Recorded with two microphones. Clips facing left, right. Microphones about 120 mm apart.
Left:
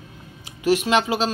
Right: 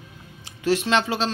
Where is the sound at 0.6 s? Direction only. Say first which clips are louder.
Left 2 dB; 15° left (ahead or behind).